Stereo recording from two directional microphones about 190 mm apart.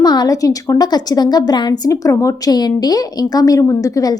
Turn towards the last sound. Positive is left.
turn(degrees=20)  # may be behind; listen again after turning